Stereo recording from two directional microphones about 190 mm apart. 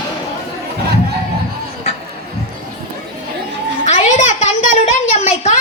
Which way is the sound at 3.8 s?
40° left (ahead or behind).